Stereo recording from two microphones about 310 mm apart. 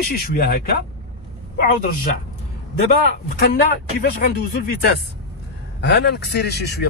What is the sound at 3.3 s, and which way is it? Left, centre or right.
Speech, left.